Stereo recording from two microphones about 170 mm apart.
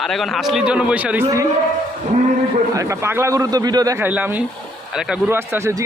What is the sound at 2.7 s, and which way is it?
A man's voice, 20° right (ahead or behind).